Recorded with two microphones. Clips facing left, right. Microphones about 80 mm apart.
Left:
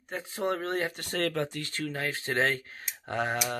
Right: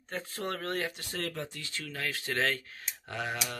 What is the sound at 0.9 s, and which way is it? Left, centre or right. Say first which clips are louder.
Speech: left 7 dB; left.